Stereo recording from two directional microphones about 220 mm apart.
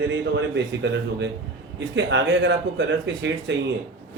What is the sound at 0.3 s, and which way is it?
A man's voice, 55° right (ahead or behind).